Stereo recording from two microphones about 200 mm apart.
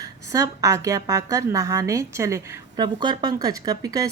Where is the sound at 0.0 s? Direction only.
15° right (ahead or behind).